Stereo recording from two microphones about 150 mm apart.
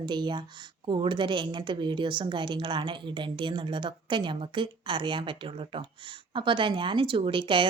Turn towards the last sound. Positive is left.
turn(degrees=-35)  # may be behind; listen again after turning